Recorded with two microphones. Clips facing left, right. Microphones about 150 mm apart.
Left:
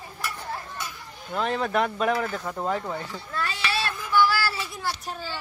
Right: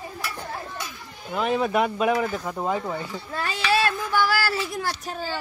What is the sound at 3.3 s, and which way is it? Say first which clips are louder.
Child singing: right 5 dB; 45° right (ahead or behind).